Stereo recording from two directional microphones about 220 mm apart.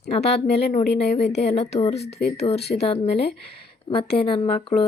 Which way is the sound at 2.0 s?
50° left (ahead or behind).